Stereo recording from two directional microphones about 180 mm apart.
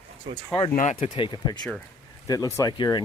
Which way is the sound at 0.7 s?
45° left (ahead or behind).